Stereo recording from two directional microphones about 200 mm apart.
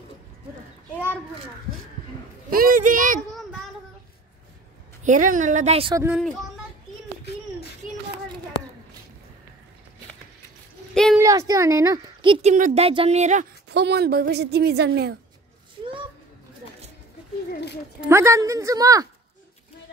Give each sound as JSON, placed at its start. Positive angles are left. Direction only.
{"t": 2.5, "sound": "a child's voice", "side_deg": -45}
{"t": 5.0, "sound": "a woman's voice", "side_deg": -40}
{"t": 5.9, "sound": "a woman's voice", "side_deg": -10}
{"t": 11.1, "sound": "a woman's voice", "side_deg": -15}
{"t": 13.7, "sound": "a woman's voice", "side_deg": -55}
{"t": 17.5, "sound": "a sound", "side_deg": 55}
{"t": 18.0, "sound": "a woman's voice", "side_deg": -15}